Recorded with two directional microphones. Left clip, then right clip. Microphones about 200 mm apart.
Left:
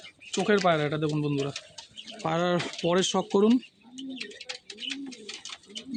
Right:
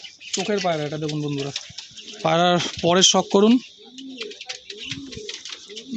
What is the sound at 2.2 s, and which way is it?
Speech, 40° right (ahead or behind).